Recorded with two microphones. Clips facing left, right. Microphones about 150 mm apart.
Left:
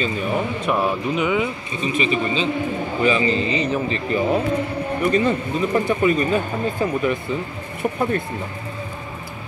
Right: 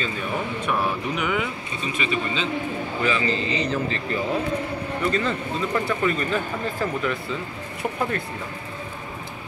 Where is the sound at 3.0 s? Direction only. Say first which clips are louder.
Left 5 dB; 15° left (ahead or behind).